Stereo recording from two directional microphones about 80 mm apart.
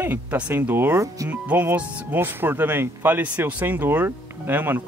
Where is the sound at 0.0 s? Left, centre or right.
Right.